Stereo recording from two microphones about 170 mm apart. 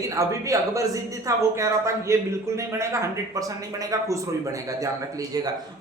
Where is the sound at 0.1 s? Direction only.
20° right (ahead or behind).